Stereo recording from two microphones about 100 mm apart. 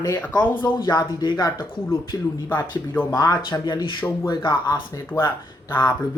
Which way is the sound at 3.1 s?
40° left (ahead or behind).